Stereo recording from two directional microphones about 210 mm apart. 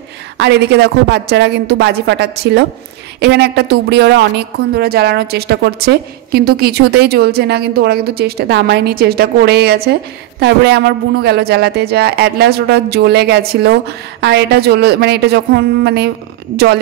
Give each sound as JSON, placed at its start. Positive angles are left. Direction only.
{"t": 0.4, "sound": "a woman's voice", "side_deg": -55}